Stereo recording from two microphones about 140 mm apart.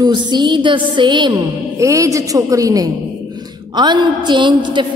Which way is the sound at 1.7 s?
20° right (ahead or behind).